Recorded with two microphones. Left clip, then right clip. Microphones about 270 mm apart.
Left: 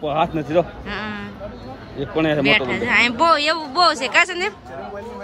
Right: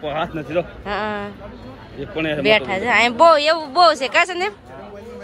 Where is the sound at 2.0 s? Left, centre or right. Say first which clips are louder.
Left 3 dB; left.